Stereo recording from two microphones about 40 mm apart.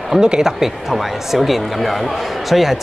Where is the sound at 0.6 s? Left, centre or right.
Centre.